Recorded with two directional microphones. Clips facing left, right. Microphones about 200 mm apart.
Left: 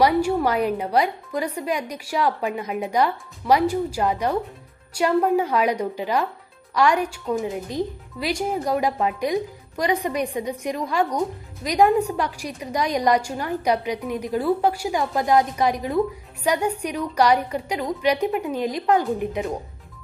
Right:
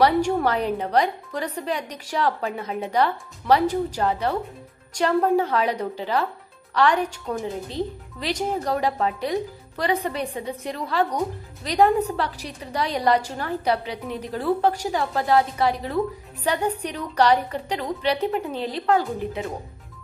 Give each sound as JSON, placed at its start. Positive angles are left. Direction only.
{"t": 0.0, "sound": "a woman's voice", "side_deg": 10}